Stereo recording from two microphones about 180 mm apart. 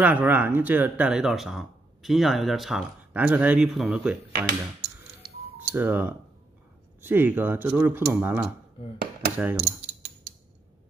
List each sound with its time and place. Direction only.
0.0 s speech: 10° right (ahead or behind)
5.6 s speech: 10° right (ahead or behind)
8.9 s a sound: 60° right (ahead or behind)
9.4 s speech: 10° right (ahead or behind)